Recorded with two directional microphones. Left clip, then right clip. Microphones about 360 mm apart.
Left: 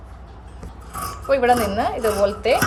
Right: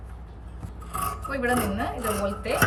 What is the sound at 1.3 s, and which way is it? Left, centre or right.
A woman's voice, centre.